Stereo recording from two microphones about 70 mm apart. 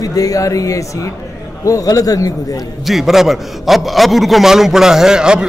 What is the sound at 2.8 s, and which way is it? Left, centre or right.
A man's voice, centre.